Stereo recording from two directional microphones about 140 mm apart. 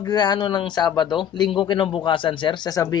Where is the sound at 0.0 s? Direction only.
30° left (ahead or behind).